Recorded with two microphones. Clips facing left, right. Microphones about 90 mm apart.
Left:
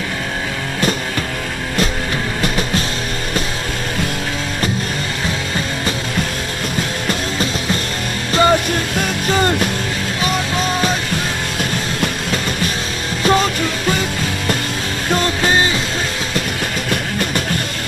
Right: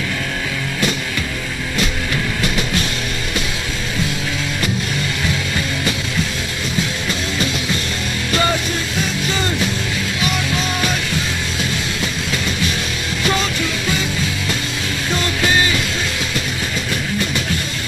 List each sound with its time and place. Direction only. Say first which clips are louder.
2.4 s music: left 3 dB; 40° left (ahead or behind)
8.3 s music: left 6 dB; 35° left (ahead or behind)
8.9 s music: left 4 dB; 50° left (ahead or behind)
10.2 s music: left 3 dB; 35° left (ahead or behind)
12.0 s train: left 2 dB; 45° left (ahead or behind)
13.2 s music: left 5 dB; 40° left (ahead or behind)
15.0 s music: left 3 dB; 40° left (ahead or behind)